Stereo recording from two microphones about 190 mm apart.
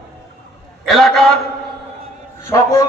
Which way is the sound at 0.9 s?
Centre (ahead or behind).